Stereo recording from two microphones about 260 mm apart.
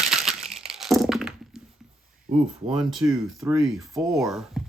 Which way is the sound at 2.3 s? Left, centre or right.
Right.